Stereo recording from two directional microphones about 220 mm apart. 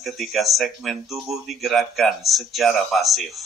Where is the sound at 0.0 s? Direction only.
Centre (ahead or behind).